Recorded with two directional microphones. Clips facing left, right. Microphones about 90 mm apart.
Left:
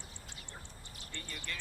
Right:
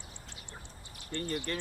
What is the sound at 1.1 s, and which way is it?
Speech, 45° right (ahead or behind).